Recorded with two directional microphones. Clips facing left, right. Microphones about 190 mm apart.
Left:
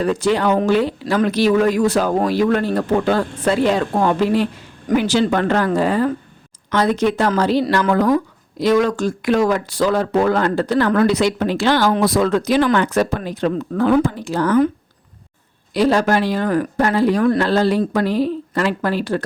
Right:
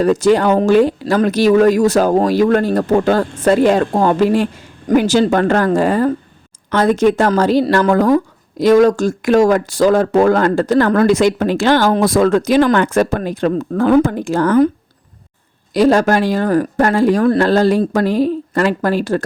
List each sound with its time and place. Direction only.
0.0 s speech: 45° right (ahead or behind)
15.7 s speech: 45° right (ahead or behind)